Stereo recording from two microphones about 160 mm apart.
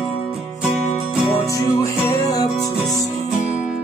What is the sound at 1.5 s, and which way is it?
Music, 20° left (ahead or behind).